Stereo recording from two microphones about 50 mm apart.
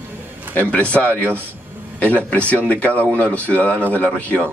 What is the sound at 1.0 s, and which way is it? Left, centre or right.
Speech, right.